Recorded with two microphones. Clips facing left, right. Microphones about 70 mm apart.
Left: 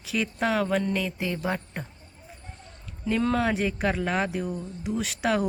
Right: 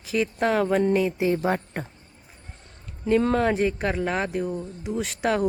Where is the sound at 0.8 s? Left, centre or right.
Right.